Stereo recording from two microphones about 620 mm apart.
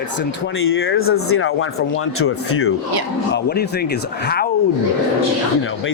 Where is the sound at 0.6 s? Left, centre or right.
Centre.